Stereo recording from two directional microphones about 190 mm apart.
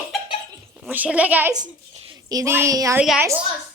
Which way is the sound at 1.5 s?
25° right (ahead or behind).